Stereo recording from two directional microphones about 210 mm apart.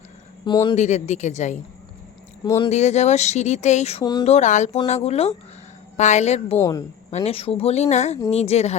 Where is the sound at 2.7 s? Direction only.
35° left (ahead or behind).